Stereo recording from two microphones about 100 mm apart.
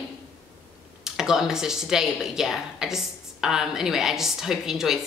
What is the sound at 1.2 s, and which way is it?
A woman's voice, 5° right (ahead or behind).